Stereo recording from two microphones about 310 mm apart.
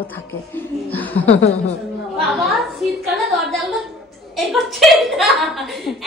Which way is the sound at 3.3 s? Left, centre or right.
Centre.